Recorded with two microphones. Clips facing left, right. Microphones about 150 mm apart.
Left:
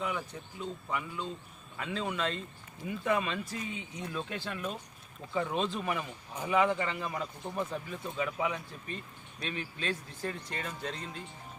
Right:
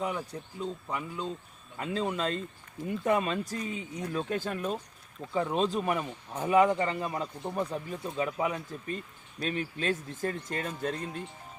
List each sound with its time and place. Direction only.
0.0 s speech: 35° right (ahead or behind)